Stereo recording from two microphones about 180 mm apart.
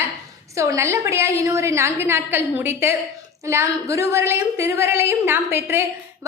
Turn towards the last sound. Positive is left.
turn(degrees=-15)  # may be behind; listen again after turning